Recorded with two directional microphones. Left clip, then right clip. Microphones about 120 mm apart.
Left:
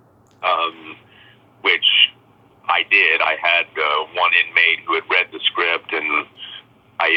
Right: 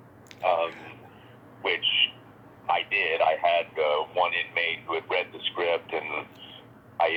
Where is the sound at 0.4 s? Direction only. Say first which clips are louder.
Left 6 dB; 45° left (ahead or behind).